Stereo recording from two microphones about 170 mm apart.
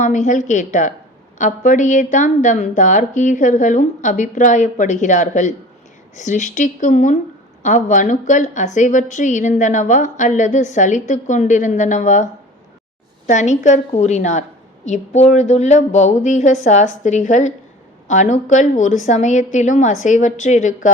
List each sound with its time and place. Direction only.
0.0 s a woman's voice: 45° left (ahead or behind)